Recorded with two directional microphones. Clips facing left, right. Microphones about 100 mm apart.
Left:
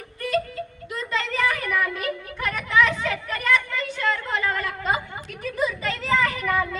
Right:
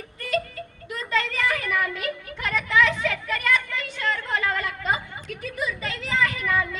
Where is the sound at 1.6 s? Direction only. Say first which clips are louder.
Left 1 dB; 40° left (ahead or behind).